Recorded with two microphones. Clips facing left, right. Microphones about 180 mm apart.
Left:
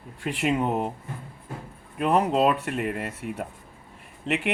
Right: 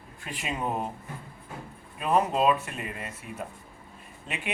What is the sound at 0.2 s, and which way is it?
Speech, 70° left (ahead or behind).